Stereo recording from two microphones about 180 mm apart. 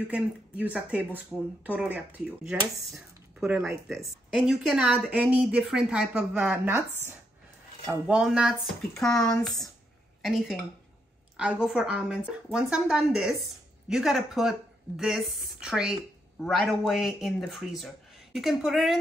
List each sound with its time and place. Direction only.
0.1 s speech: 10° right (ahead or behind)
8.2 s speech: centre (ahead or behind)